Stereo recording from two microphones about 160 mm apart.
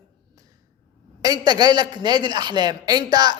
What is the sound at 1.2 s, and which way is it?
A man's voice, 25° right (ahead or behind).